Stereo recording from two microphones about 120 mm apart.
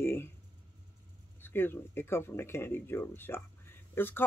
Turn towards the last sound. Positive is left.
turn(degrees=15)  # may be behind; listen again after turning